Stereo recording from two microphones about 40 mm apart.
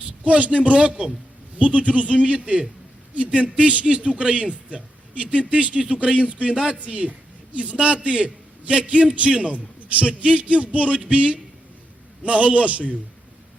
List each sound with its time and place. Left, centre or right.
0.3 s a man's voice: right
1.5 s a man's voice: right